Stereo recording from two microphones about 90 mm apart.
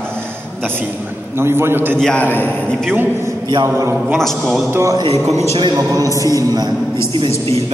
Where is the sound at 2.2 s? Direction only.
25° left (ahead or behind).